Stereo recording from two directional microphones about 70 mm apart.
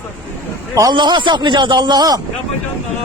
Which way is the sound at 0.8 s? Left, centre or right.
Right.